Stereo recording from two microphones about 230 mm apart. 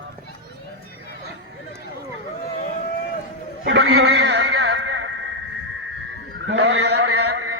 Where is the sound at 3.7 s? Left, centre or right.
Right.